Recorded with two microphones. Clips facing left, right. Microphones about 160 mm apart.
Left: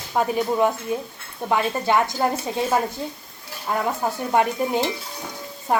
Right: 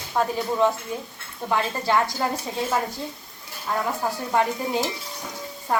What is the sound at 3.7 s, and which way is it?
Speech, 20° left (ahead or behind).